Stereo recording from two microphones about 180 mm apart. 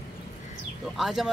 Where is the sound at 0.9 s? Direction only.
Centre (ahead or behind).